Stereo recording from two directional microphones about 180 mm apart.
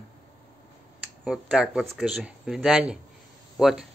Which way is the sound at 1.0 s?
5° right (ahead or behind).